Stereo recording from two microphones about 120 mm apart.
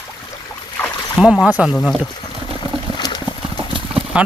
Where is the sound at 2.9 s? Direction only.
35° left (ahead or behind).